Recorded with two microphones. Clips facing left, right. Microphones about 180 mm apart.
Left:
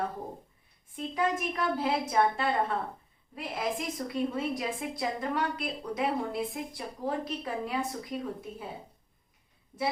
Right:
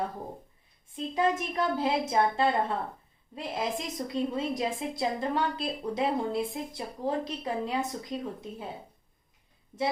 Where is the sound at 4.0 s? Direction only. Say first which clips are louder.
Right 1 dB; 20° right (ahead or behind).